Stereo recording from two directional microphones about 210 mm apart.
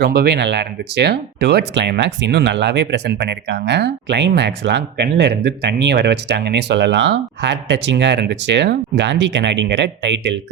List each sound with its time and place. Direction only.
0.0 s speech: 50° right (ahead or behind)